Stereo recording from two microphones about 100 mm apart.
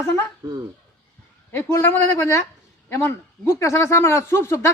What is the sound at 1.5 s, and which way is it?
Speech, 25° left (ahead or behind).